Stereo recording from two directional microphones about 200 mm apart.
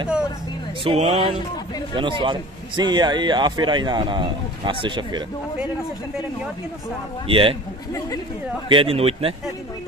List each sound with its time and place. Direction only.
0.8 s a man's voice: 25° right (ahead or behind)
7.2 s a man's voice: 25° right (ahead or behind)
8.6 s a man's voice: 25° right (ahead or behind)